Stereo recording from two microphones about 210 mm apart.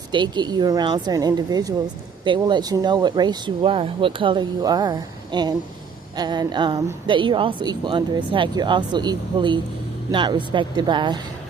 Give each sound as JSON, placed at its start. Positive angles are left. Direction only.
{"t": 0.1, "sound": "a woman's voice", "side_deg": -20}